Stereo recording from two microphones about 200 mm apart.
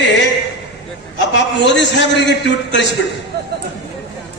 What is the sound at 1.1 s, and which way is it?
A man's voice, 60° left (ahead or behind).